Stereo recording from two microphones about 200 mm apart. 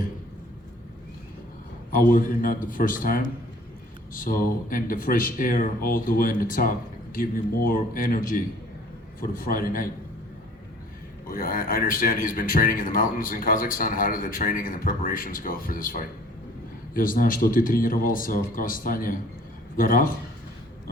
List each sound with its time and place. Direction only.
1.9 s a man's voice: 45° left (ahead or behind)
11.3 s a man's voice: 45° left (ahead or behind)